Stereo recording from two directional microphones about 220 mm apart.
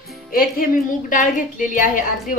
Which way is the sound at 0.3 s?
40° left (ahead or behind).